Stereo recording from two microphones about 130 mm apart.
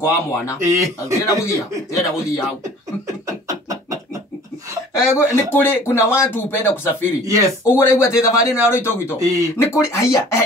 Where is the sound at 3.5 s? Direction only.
25° right (ahead or behind).